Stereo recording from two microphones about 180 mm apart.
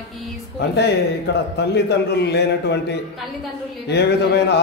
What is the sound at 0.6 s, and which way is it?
A man's voice, 70° left (ahead or behind).